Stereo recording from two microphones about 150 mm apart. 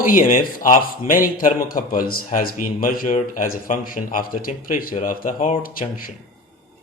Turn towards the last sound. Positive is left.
turn(degrees=70)  # may be behind; listen again after turning